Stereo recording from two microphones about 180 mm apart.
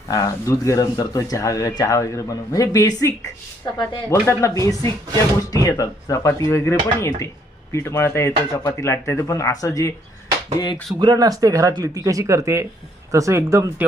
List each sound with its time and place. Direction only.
0.1 s speech: 20° left (ahead or behind)
11.0 s speech: 20° right (ahead or behind)